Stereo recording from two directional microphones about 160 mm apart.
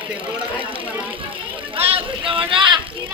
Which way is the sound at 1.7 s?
35° right (ahead or behind).